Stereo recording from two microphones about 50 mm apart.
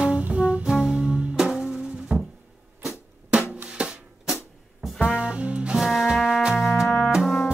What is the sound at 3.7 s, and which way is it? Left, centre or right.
Music, centre.